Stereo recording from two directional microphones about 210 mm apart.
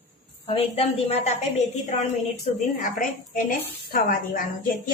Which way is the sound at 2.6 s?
40° left (ahead or behind).